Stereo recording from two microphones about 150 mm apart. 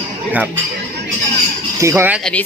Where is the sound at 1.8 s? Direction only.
20° right (ahead or behind).